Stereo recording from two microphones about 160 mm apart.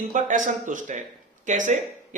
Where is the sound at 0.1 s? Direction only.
50° right (ahead or behind).